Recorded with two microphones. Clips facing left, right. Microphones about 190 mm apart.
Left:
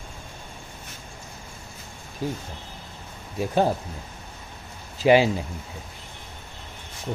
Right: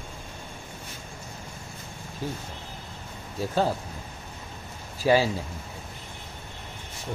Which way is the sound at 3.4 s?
15° left (ahead or behind).